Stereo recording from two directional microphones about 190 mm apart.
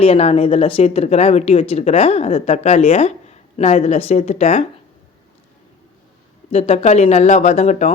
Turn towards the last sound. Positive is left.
turn(degrees=35)  # may be behind; listen again after turning